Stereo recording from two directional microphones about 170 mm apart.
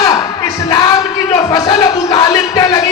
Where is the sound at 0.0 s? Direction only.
20° left (ahead or behind).